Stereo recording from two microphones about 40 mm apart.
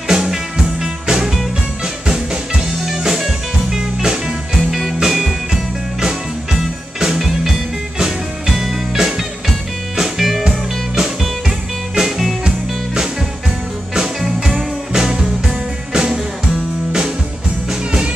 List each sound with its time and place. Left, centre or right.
0.1 s music: centre
2.8 s music: centre
4.6 s music: centre
10.4 s music: centre
12.4 s music: centre
17.6 s music: right